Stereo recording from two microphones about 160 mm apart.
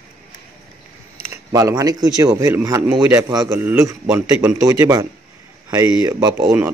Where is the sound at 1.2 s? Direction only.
20° right (ahead or behind).